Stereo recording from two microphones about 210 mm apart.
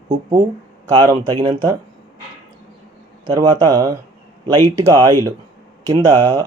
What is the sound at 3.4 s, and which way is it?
Speech, 15° right (ahead or behind).